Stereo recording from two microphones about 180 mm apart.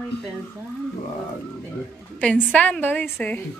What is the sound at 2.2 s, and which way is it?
Speech, 5° left (ahead or behind).